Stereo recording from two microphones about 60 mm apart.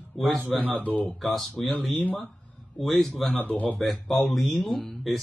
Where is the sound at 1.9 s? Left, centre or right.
Left.